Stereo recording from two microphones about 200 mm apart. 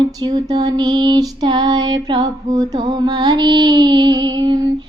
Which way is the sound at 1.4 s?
20° right (ahead or behind).